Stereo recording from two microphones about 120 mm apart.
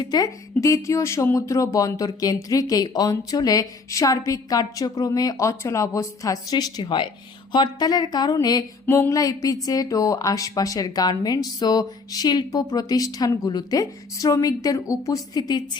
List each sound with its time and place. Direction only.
0.0 s speech: 30° left (ahead or behind)